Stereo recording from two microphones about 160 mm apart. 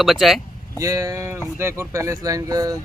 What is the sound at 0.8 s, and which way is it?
Speech, 20° right (ahead or behind).